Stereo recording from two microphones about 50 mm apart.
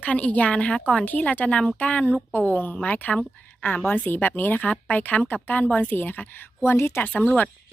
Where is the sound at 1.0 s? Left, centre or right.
Left.